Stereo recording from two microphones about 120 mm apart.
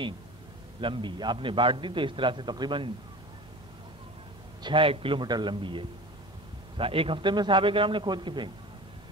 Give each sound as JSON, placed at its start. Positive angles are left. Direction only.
{"t": 0.7, "sound": "a man's voice", "side_deg": -45}
{"t": 4.6, "sound": "a man's voice", "side_deg": -45}